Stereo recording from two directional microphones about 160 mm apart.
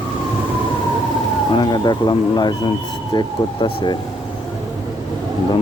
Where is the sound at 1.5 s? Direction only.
30° left (ahead or behind).